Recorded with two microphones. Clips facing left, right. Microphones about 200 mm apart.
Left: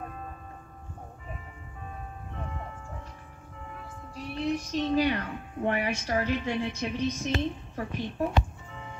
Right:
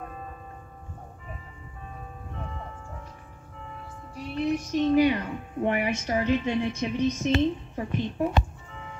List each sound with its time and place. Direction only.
4.1 s speech: 15° right (ahead or behind)